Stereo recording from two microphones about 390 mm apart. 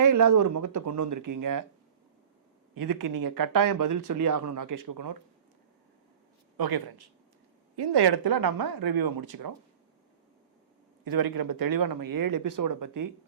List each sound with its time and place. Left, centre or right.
0.0 s speech: right
2.7 s speech: right
6.6 s speech: right
7.8 s speech: right
11.0 s speech: right